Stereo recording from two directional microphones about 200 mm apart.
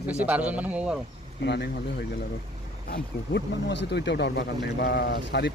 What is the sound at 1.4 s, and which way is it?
Speech, 60° left (ahead or behind).